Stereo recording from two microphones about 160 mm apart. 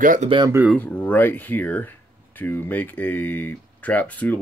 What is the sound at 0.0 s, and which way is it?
Speech, 55° right (ahead or behind).